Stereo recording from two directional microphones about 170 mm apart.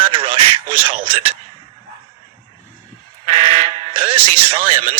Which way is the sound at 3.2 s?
30° right (ahead or behind).